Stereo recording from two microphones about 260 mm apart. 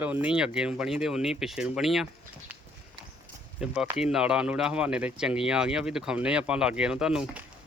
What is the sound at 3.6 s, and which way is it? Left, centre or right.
Speech, centre.